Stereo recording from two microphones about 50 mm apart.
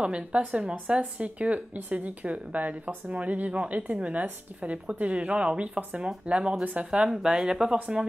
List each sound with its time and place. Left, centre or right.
0.0 s a woman's voice: right